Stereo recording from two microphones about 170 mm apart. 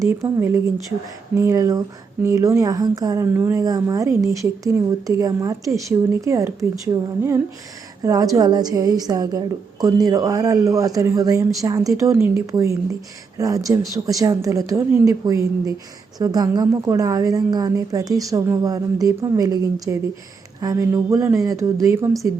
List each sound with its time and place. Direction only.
0.0 s speech: 15° right (ahead or behind)